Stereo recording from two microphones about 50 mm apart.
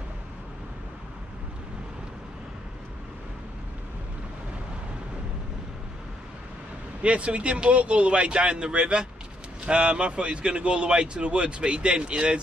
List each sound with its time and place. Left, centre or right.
7.0 s speech: right